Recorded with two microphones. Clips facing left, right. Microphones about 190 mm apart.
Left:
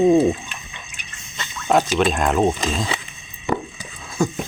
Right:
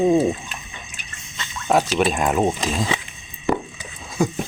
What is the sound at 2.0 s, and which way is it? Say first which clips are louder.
Speech: left 1 dB; 5° right (ahead or behind).